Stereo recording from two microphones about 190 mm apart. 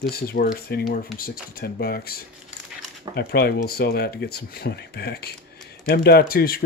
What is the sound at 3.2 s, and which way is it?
Speech, 55° left (ahead or behind).